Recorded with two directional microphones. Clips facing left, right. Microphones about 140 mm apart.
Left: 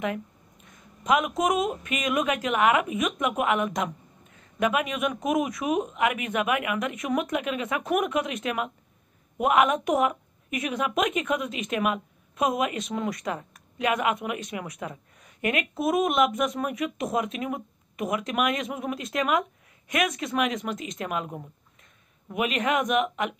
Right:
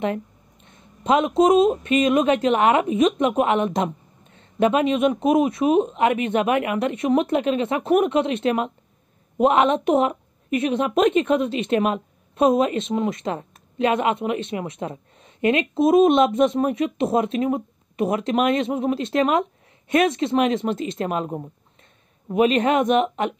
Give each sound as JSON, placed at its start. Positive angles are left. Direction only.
{"t": 0.0, "sound": "a woman's voice", "side_deg": -30}